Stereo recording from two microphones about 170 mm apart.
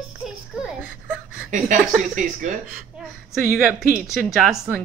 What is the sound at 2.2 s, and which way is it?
Speech, 50° right (ahead or behind).